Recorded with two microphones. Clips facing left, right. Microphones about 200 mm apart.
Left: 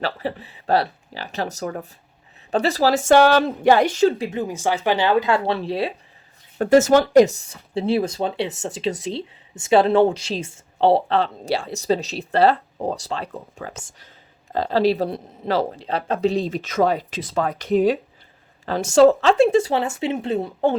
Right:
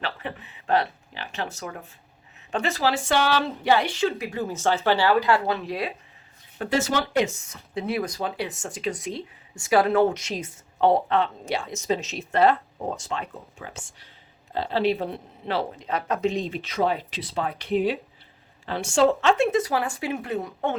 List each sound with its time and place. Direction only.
0.0 s a sound: 35° left (ahead or behind)
2.5 s a woman's voice: 35° left (ahead or behind)
4.2 s speech: 20° left (ahead or behind)
6.6 s speech: 45° left (ahead or behind)
14.5 s speech: 40° left (ahead or behind)